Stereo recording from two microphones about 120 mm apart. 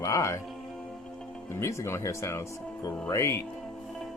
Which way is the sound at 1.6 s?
25° left (ahead or behind).